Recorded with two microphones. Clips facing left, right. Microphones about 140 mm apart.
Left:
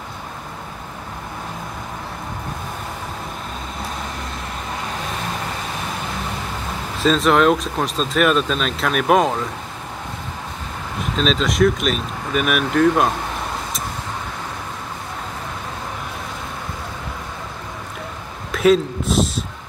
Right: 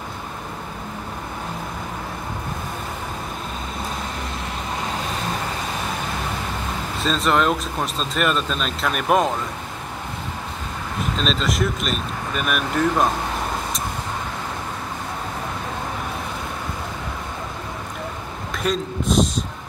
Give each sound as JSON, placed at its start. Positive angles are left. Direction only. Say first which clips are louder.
{"t": 7.0, "sound": "speech", "louder": "left 5 dB", "side_deg": 0}
{"t": 11.2, "sound": "speech", "louder": "left 7 dB", "side_deg": 0}
{"t": 18.5, "sound": "speech", "louder": "left 9 dB", "side_deg": 0}